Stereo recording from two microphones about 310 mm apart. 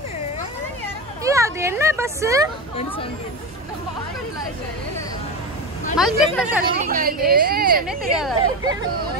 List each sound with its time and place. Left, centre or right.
1.2 s speech: centre
5.9 s speech: centre
6.8 s speech: right
8.1 s speech: centre